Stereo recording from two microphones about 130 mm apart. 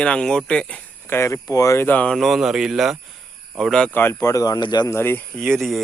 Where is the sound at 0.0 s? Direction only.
5° left (ahead or behind).